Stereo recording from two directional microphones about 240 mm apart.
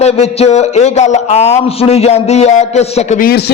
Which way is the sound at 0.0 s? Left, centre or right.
Left.